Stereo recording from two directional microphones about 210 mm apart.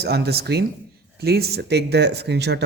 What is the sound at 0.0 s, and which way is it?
Speech, 50° right (ahead or behind).